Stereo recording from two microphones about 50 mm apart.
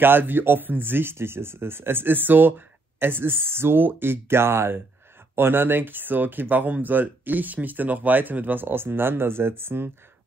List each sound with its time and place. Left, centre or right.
0.0 s speech: right